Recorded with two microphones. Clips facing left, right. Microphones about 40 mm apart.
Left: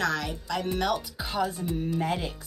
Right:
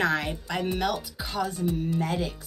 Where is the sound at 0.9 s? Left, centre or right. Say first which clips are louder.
Left 1 dB; centre.